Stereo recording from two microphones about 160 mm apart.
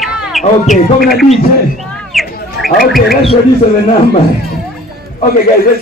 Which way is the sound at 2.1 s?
Centre (ahead or behind).